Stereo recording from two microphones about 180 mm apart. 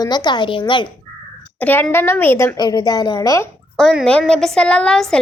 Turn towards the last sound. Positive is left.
turn(degrees=5)  # may be behind; listen again after turning